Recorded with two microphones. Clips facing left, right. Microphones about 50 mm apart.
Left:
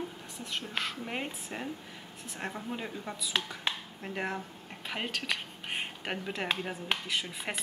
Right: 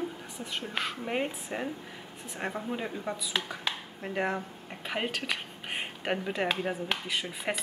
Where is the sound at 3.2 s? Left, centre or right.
Centre.